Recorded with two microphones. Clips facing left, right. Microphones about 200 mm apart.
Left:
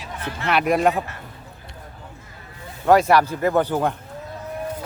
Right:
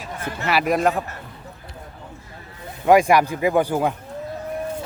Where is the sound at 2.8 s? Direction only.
15° right (ahead or behind).